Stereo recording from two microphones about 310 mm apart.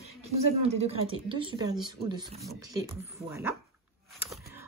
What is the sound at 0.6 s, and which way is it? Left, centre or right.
Speech, centre.